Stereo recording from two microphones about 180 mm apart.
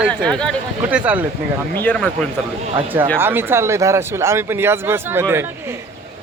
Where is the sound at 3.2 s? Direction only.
10° right (ahead or behind).